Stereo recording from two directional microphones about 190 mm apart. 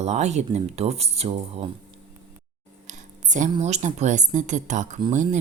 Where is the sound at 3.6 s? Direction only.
35° right (ahead or behind).